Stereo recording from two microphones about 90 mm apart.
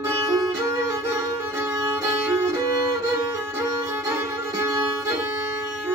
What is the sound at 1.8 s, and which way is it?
Violin, 30° right (ahead or behind).